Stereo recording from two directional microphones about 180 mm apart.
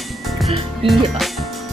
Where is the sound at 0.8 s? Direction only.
30° right (ahead or behind).